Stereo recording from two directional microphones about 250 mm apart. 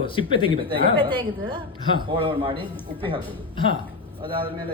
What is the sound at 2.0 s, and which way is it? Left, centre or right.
Speech, centre.